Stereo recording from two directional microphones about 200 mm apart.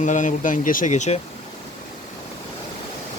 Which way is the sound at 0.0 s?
40° left (ahead or behind).